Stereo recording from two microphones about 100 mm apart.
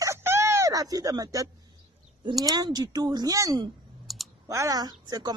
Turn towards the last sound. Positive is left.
turn(degrees=-40)  # may be behind; listen again after turning